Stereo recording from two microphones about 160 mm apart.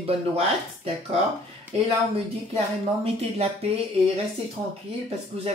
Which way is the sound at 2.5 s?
40° right (ahead or behind).